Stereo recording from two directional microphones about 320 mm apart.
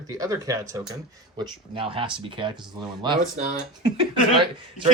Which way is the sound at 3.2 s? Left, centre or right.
Right.